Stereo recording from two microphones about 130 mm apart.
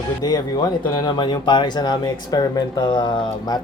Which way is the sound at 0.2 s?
30° left (ahead or behind).